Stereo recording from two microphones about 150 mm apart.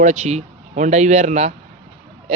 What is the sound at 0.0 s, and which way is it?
Speech, 50° right (ahead or behind).